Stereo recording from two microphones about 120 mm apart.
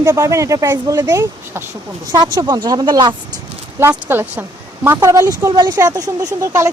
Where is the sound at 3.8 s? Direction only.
20° right (ahead or behind).